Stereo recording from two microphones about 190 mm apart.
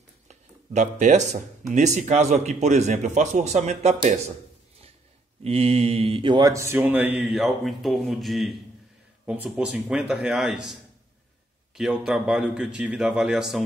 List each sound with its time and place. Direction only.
0.3 s speech: 40° right (ahead or behind)
5.4 s a man's voice: 30° right (ahead or behind); by 13.7 s centre (ahead or behind)